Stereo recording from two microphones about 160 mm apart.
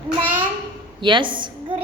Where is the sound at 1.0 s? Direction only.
30° right (ahead or behind).